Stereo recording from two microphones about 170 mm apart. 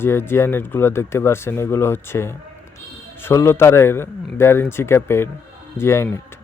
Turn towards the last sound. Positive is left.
turn(degrees=15)  # may be behind; listen again after turning